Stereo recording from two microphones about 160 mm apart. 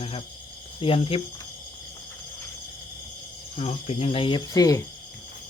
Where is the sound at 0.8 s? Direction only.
35° left (ahead or behind).